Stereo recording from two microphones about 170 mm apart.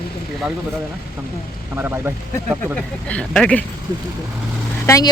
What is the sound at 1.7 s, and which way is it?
Speech, 10° right (ahead or behind).